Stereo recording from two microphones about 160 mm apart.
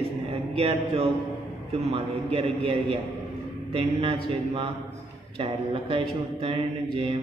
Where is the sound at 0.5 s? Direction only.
40° right (ahead or behind).